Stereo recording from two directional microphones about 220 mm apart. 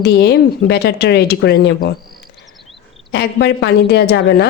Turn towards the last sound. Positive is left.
turn(degrees=50)  # may be behind; listen again after turning